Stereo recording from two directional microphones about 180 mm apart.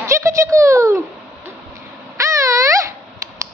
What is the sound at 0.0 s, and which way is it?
Speech, 15° right (ahead or behind).